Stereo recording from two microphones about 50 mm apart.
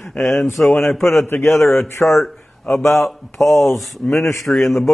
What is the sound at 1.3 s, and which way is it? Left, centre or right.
Speech, left.